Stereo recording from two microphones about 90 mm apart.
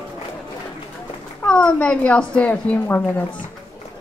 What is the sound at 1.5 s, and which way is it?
A woman's voice, 10° left (ahead or behind).